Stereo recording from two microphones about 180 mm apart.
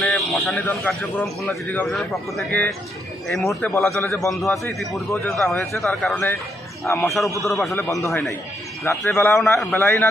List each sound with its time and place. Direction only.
0.0 s a sound: centre (ahead or behind)
0.7 s a man's voice: 10° left (ahead or behind)
3.7 s speech: 15° left (ahead or behind)
4.3 s a man's voice: centre (ahead or behind)
5.1 s speech: 15° left (ahead or behind)
5.4 s a man's voice: centre (ahead or behind)
6.8 s speech: 15° left (ahead or behind)
7.4 s a man's voice: centre (ahead or behind)
7.7 s speech: 15° left (ahead or behind)